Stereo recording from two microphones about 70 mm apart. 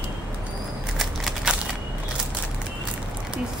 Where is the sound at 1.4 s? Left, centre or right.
Centre.